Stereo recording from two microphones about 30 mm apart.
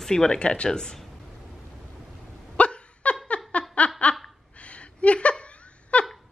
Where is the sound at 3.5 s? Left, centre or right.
Left.